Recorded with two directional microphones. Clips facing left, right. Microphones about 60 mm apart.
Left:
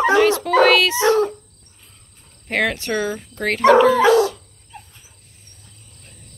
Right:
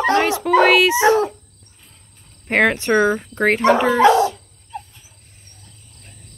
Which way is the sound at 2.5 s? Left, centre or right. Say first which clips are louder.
Right 5 dB; right.